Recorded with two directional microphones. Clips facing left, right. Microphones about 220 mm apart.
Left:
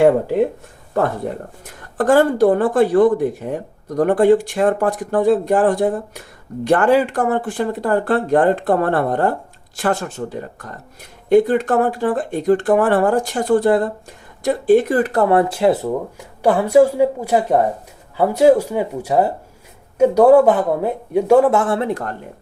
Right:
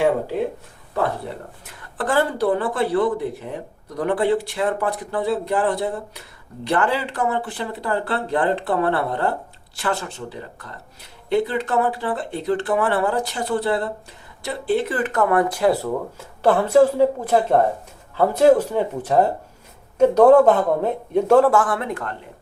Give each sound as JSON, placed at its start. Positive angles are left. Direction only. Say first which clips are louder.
{"t": 0.9, "sound": "speech", "louder": "left 4 dB", "side_deg": 45}
{"t": 16.4, "sound": "speech", "louder": "left 2 dB", "side_deg": 10}